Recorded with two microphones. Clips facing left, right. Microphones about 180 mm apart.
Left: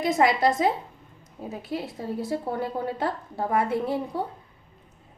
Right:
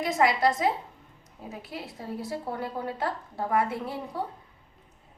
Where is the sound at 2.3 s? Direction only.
25° left (ahead or behind).